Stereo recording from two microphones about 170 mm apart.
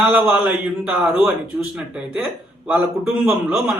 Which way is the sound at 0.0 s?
10° right (ahead or behind).